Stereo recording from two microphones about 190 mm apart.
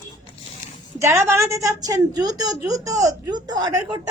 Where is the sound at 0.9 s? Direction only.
15° right (ahead or behind).